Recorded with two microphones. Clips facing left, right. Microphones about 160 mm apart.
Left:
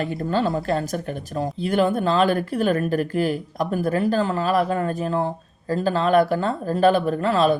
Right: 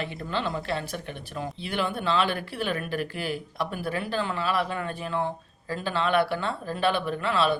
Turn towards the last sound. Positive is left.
turn(degrees=40)  # may be behind; listen again after turning